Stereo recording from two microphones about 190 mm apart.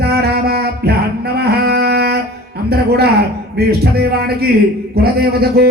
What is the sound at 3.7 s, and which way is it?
A man's voice, 55° right (ahead or behind).